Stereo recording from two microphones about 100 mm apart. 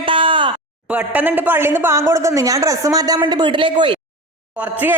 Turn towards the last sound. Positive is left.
turn(degrees=-20)  # may be behind; listen again after turning